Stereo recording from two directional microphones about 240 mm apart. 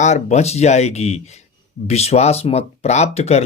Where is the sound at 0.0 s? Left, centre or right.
Left.